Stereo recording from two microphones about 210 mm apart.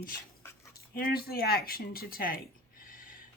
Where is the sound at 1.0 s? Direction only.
45° left (ahead or behind).